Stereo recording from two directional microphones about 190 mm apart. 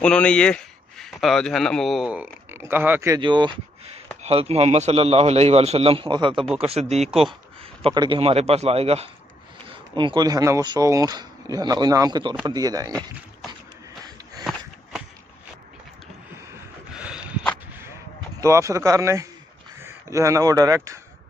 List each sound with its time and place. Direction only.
0.0 s a man's voice: 5° left (ahead or behind); by 3.2 s 10° right (ahead or behind)
3.2 s a man's voice: 25° right (ahead or behind)
7.1 s a man's voice: centre (ahead or behind)
7.8 s a man's voice: 25° right (ahead or behind)
14.4 s a sound: 5° right (ahead or behind)
16.9 s a sound: 5° right (ahead or behind)
18.4 s speech: 15° right (ahead or behind)